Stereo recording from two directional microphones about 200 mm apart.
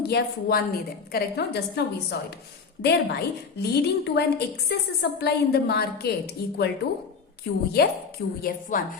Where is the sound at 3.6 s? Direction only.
55° left (ahead or behind).